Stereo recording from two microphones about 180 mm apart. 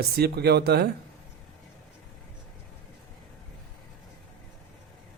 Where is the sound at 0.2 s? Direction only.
65° right (ahead or behind).